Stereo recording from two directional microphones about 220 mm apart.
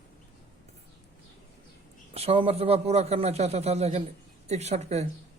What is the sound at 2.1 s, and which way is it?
A man's voice, 25° right (ahead or behind).